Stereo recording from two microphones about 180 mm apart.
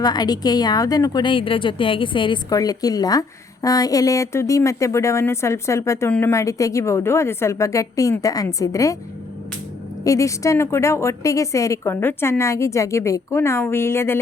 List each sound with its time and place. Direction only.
0.0 s a woman's voice: 20° left (ahead or behind)
10.0 s a woman's voice: 20° left (ahead or behind)